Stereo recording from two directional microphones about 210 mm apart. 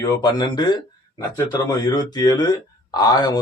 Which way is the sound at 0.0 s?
20° left (ahead or behind).